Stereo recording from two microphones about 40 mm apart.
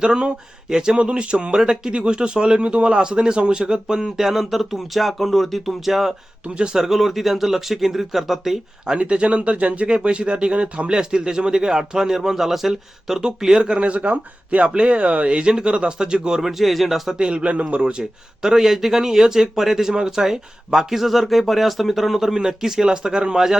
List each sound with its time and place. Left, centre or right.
0.0 s speech: right
4.2 s speech: centre
6.4 s speech: right
6.7 s speech: centre
9.0 s speech: right
16.4 s speech: centre
17.2 s speech: right
18.4 s speech: centre